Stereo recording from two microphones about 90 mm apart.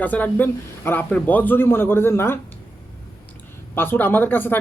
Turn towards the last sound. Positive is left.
turn(degrees=20)  # may be behind; listen again after turning